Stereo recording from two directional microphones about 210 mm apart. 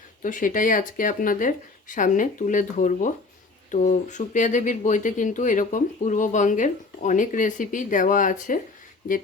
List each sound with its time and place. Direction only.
0.2 s speech: 40° left (ahead or behind)